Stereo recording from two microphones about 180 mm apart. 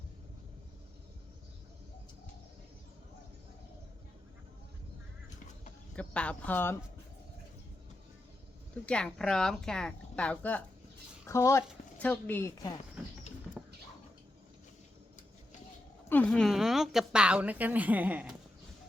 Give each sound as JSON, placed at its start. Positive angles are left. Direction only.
{"t": 6.0, "sound": "speech", "side_deg": 5}
{"t": 8.9, "sound": "a woman's voice", "side_deg": 5}
{"t": 13.6, "sound": "a sound", "side_deg": 0}
{"t": 16.0, "sound": "a woman's voice", "side_deg": 10}